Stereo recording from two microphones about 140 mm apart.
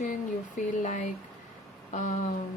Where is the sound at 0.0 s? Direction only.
65° left (ahead or behind).